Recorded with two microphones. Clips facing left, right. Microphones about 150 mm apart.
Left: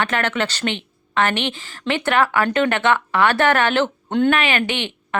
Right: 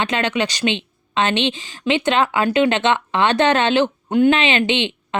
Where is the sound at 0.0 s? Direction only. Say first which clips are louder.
Right 1 dB; 15° right (ahead or behind).